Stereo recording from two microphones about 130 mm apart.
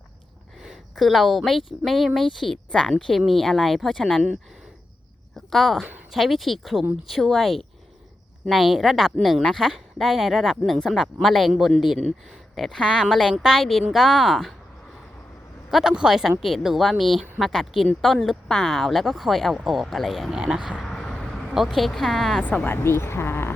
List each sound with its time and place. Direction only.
0.6 s speech: centre (ahead or behind)
5.5 s speech: centre (ahead or behind)
15.7 s speech: 5° right (ahead or behind)
22.4 s speech: 15° left (ahead or behind)